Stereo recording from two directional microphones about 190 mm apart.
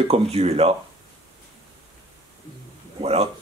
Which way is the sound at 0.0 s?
35° right (ahead or behind).